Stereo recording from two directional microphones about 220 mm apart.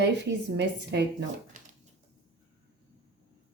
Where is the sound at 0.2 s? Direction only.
50° right (ahead or behind).